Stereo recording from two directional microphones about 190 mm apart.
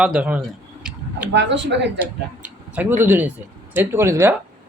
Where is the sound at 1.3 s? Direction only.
65° right (ahead or behind).